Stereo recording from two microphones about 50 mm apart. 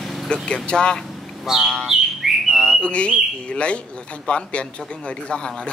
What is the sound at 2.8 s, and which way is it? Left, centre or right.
Speech, left.